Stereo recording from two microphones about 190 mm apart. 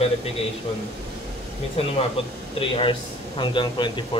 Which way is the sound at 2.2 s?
30° left (ahead or behind).